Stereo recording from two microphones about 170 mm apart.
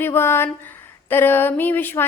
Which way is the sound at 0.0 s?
15° left (ahead or behind).